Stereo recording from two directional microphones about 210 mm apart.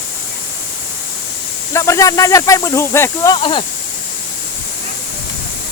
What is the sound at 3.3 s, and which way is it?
Speech, 25° left (ahead or behind).